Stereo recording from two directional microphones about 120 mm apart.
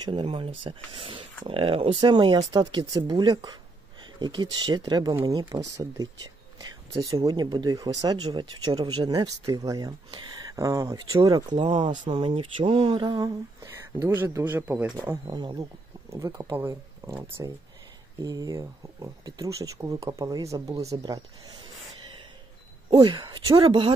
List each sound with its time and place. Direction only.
0.0 s speech: 45° right (ahead or behind)
5.5 s speech: 30° right (ahead or behind)
12.1 s speech: 45° right (ahead or behind)
14.0 s speech: 20° right (ahead or behind)
15.2 s speech: 35° right (ahead or behind)
18.2 s speech: 30° right (ahead or behind)
22.8 s speech: 40° right (ahead or behind)